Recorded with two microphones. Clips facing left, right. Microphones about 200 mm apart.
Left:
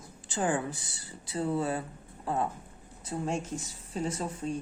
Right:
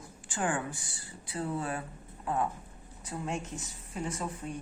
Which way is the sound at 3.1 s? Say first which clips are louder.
Left 4 dB; 30° left (ahead or behind).